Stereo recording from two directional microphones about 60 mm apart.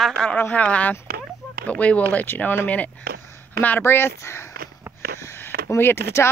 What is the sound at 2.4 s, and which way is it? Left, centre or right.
Speech, left.